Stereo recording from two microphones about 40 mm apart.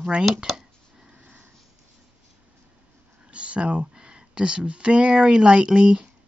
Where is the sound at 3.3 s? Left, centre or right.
Right.